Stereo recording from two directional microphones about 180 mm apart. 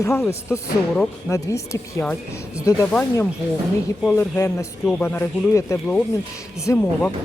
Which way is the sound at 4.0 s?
10° left (ahead or behind).